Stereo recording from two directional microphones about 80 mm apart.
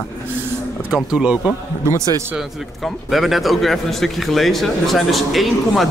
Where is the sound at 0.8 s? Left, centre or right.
Centre.